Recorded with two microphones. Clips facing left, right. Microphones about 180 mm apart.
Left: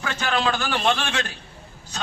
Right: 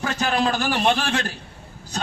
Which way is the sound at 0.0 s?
40° right (ahead or behind).